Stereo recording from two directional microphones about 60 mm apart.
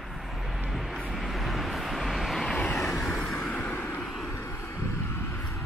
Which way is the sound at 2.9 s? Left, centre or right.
Centre.